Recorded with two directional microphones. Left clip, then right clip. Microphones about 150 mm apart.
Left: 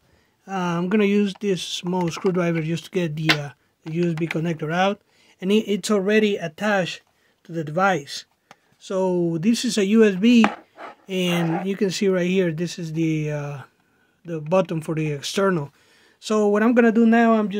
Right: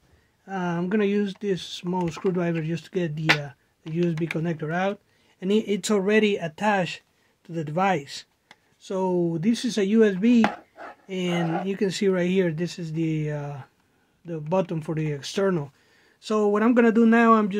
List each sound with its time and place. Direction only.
0.5 s speech: 40° left (ahead or behind)
4.4 s speech: 35° left (ahead or behind)
5.8 s speech: 15° left (ahead or behind); by 10.5 s 40° left (ahead or behind)
10.5 s chopping: 20° left (ahead or behind)
11.1 s speech: 50° left (ahead or behind)
11.6 s speech: 30° left (ahead or behind); by 17.6 s 5° left (ahead or behind)